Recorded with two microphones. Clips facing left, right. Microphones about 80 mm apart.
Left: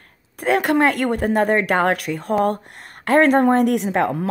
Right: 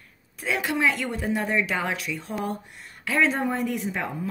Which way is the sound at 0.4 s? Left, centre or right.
Left.